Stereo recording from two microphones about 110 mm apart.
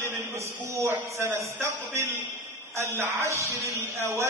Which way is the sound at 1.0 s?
25° right (ahead or behind).